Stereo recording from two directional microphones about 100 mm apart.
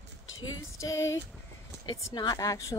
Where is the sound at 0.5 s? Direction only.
35° left (ahead or behind).